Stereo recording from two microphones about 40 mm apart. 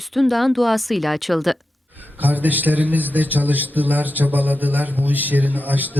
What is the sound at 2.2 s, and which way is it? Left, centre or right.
A man's voice, right.